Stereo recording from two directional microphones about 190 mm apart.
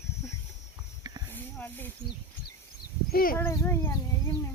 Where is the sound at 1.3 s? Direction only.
10° left (ahead or behind).